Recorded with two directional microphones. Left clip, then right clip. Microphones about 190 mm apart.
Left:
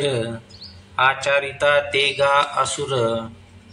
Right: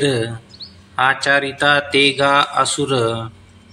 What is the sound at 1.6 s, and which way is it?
Speech, 25° right (ahead or behind).